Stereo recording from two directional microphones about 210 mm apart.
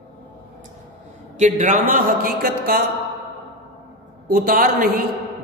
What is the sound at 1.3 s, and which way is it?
A man's voice, 40° right (ahead or behind).